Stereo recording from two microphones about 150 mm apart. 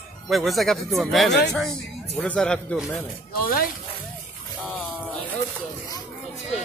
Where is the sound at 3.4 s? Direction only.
75° left (ahead or behind).